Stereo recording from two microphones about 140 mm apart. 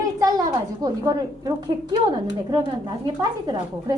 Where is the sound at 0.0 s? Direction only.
25° right (ahead or behind).